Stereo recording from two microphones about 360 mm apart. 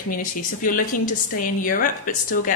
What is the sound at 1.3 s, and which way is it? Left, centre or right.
A woman's voice, left.